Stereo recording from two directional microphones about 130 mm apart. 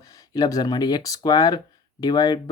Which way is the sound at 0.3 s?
30° left (ahead or behind).